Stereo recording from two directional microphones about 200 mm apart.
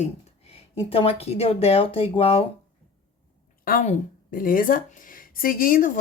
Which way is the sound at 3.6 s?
45° left (ahead or behind).